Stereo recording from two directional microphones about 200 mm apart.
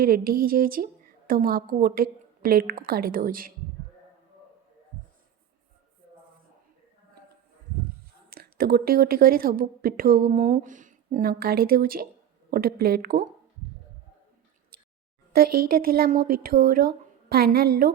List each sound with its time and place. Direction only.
0.0 s a woman's voice: 45° right (ahead or behind)
8.3 s a woman's voice: 45° right (ahead or behind)
14.7 s a sound: 50° right (ahead or behind)
15.3 s a woman's voice: 50° right (ahead or behind)